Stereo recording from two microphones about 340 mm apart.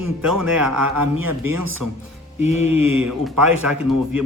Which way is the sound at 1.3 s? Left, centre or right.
Right.